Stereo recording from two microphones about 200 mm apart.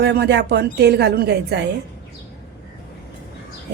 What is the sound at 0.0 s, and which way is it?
A woman's voice, 55° right (ahead or behind).